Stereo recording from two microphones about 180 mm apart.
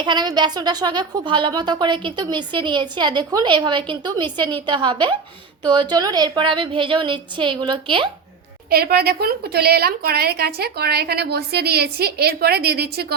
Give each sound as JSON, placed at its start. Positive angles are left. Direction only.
{"t": 0.0, "sound": "a woman's voice", "side_deg": -25}
{"t": 8.7, "sound": "a woman's voice", "side_deg": -60}